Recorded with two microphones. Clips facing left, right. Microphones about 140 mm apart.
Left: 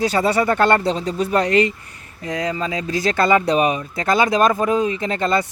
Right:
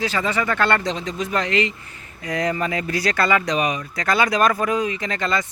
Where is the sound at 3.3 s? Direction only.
35° left (ahead or behind).